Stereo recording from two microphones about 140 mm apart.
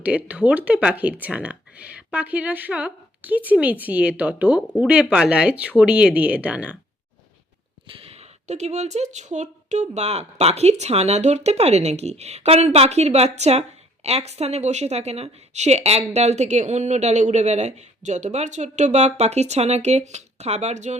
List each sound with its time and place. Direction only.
0.0 s a woman's voice: 10° right (ahead or behind)
7.9 s speech: 40° right (ahead or behind)